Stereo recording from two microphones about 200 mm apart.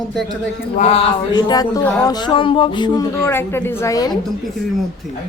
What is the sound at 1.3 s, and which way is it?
Speech, 20° left (ahead or behind).